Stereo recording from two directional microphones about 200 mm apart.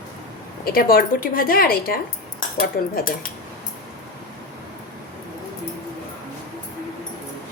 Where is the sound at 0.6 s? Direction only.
50° left (ahead or behind).